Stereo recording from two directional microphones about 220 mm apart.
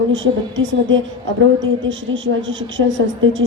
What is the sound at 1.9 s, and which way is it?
Speech, 55° right (ahead or behind).